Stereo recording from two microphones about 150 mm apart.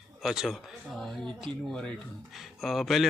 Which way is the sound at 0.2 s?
Centre (ahead or behind).